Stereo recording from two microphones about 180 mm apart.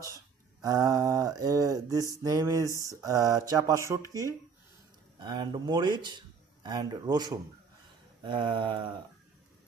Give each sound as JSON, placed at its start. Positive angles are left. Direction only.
{"t": 0.6, "sound": "speech", "side_deg": -20}